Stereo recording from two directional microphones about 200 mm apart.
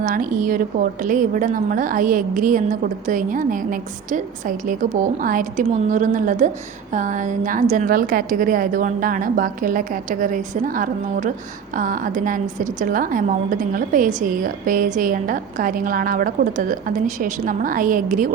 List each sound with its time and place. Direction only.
0.0 s a woman's voice: 45° right (ahead or behind)